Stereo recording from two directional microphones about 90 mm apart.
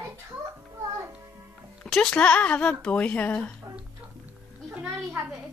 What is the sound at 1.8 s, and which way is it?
Music, 5° left (ahead or behind).